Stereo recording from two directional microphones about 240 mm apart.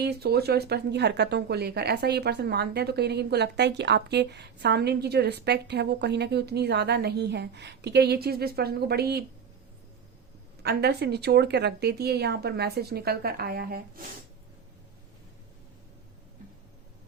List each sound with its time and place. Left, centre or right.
0.0 s speech: right
10.6 s a woman's voice: right